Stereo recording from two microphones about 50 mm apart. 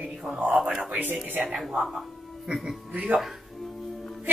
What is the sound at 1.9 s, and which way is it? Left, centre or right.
Speech, centre.